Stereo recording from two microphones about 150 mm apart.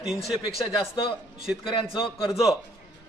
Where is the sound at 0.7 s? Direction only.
35° left (ahead or behind).